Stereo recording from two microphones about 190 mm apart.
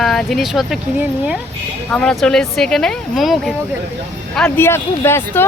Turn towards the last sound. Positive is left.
turn(degrees=10)  # may be behind; listen again after turning